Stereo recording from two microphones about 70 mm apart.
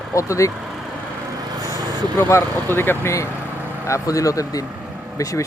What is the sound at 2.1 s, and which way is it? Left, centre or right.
Speech, left.